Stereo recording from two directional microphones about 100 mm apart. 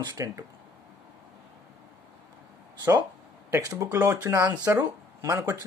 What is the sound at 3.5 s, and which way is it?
Speech, 35° right (ahead or behind).